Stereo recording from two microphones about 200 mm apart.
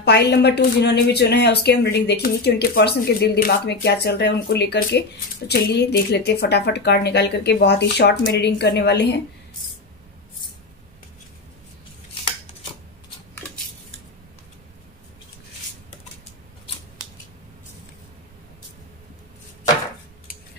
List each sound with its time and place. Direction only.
0.0 s speech: 55° left (ahead or behind)